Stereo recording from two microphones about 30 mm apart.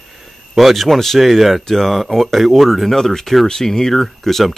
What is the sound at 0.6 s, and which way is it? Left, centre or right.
Speech, centre.